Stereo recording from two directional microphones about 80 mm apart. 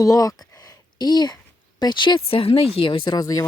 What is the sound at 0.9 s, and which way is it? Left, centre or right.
Speech, left.